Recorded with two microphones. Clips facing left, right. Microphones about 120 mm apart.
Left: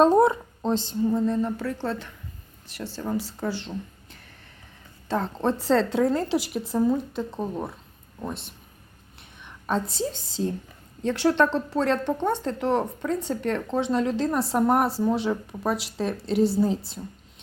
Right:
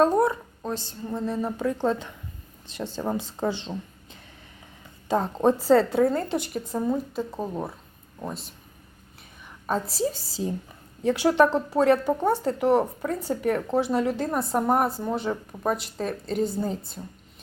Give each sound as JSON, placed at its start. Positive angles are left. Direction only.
{"t": 0.0, "sound": "speech", "side_deg": 25}
{"t": 1.0, "sound": "speech", "side_deg": 0}
{"t": 1.4, "sound": "a woman's voice", "side_deg": -15}
{"t": 9.6, "sound": "a woman's voice", "side_deg": -5}